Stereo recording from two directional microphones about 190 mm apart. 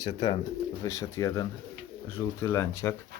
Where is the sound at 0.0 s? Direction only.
25° left (ahead or behind).